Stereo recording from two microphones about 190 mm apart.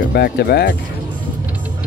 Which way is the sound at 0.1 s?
55° left (ahead or behind).